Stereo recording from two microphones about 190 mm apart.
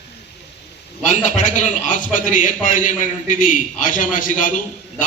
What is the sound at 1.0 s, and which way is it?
A man's voice, 40° left (ahead or behind).